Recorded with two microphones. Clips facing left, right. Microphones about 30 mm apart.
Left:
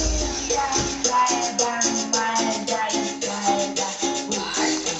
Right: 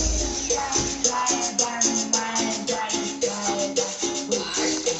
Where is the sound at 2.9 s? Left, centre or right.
Centre.